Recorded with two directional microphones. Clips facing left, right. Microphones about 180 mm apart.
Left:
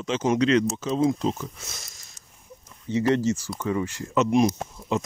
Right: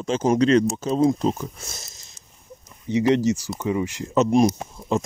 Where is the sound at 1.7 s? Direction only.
25° right (ahead or behind).